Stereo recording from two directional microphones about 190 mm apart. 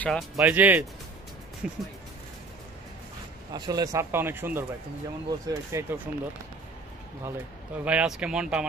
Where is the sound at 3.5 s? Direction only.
20° right (ahead or behind).